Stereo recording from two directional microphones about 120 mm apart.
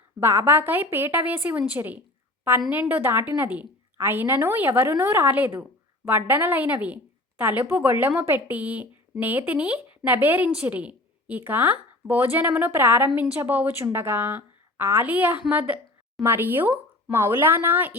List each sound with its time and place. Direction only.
0.2 s speech: 20° right (ahead or behind)